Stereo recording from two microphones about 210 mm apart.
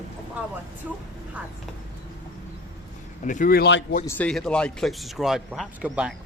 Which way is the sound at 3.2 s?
40° left (ahead or behind).